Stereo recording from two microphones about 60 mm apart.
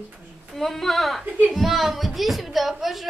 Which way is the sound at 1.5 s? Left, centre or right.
Centre.